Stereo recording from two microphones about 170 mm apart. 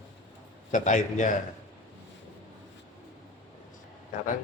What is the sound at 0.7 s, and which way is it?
Speech, 50° left (ahead or behind).